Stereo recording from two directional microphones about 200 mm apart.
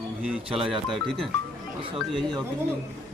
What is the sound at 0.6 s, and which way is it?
Speech, centre (ahead or behind).